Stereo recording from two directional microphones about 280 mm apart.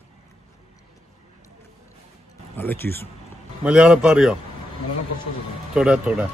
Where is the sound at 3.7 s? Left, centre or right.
Centre.